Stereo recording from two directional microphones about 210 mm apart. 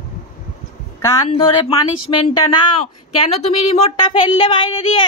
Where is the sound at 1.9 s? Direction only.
85° left.